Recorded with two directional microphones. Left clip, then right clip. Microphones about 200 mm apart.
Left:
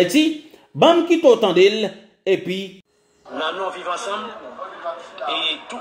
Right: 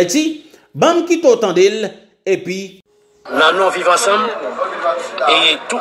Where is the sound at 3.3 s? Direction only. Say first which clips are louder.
Right 12 dB; 35° right (ahead or behind).